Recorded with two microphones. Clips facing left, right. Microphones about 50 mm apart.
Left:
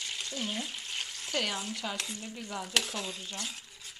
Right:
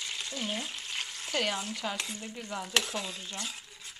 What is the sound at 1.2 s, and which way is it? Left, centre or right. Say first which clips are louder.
Stir: right 2 dB; centre.